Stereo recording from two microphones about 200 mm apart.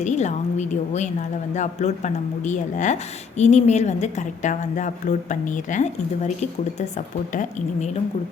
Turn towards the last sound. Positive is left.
turn(degrees=35)  # may be behind; listen again after turning